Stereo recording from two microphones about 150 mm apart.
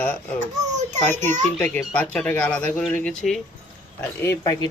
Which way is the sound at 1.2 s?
55° right (ahead or behind).